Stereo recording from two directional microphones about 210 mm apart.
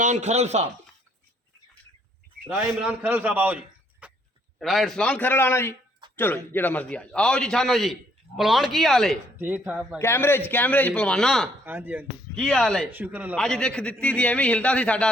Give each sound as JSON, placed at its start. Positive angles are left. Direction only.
{"t": 0.0, "sound": "speech", "side_deg": -35}
{"t": 2.5, "sound": "a man's voice", "side_deg": -5}
{"t": 4.0, "sound": "a sound", "side_deg": -5}
{"t": 4.6, "sound": "a man's voice", "side_deg": 0}
{"t": 10.0, "sound": "a man's voice", "side_deg": 10}
{"t": 11.6, "sound": "speech", "side_deg": -10}
{"t": 12.4, "sound": "a man's voice", "side_deg": 5}
{"t": 12.9, "sound": "a man's voice", "side_deg": -10}
{"t": 13.3, "sound": "a man's voice", "side_deg": 5}